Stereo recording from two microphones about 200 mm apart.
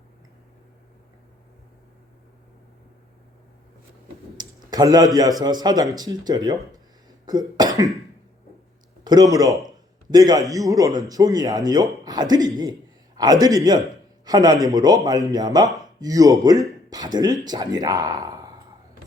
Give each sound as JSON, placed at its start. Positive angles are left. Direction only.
{"t": 4.4, "sound": "a sound", "side_deg": -20}
{"t": 5.4, "sound": "speech", "side_deg": -20}
{"t": 7.3, "sound": "cough", "side_deg": -20}
{"t": 9.3, "sound": "a man's voice", "side_deg": -15}